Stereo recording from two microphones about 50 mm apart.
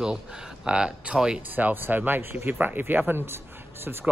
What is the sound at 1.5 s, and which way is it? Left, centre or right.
Speech, right.